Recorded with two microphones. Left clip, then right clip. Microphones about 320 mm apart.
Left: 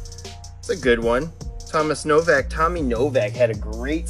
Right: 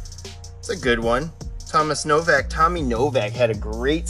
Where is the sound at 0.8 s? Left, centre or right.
Centre.